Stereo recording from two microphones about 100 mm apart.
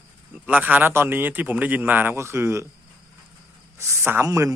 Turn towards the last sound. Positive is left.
turn(degrees=-30)  # may be behind; listen again after turning